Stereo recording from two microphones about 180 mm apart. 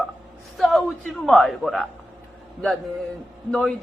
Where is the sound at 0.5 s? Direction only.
Centre (ahead or behind).